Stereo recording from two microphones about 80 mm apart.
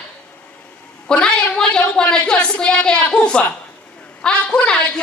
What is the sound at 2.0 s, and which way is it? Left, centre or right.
A man's voice, centre.